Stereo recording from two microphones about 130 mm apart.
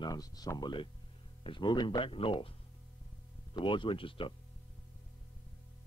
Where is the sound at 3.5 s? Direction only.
40° left (ahead or behind).